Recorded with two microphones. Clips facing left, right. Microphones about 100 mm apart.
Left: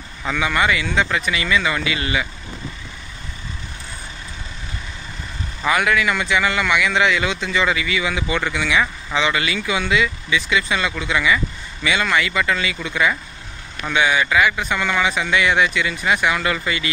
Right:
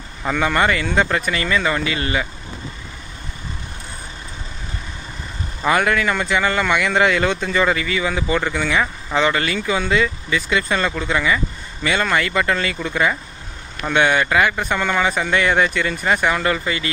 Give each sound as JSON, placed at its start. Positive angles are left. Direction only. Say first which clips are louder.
{"t": 0.4, "sound": "a man's voice", "louder": "right 1 dB", "side_deg": -45}
{"t": 5.7, "sound": "a man's voice", "louder": "right 1 dB", "side_deg": -40}
{"t": 13.9, "sound": "speech", "louder": "right 1 dB", "side_deg": -50}